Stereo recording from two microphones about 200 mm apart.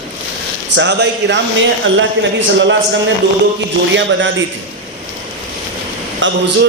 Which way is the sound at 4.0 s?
65° right (ahead or behind).